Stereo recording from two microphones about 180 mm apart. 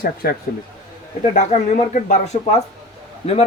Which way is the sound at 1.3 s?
45° left (ahead or behind).